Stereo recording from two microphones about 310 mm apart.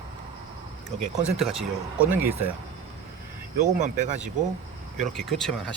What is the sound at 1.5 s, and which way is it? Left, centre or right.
Speech, centre.